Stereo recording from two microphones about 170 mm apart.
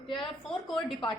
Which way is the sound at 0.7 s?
25° left (ahead or behind).